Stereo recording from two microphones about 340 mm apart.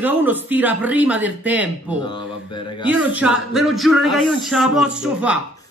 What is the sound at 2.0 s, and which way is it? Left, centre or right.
Speech, centre.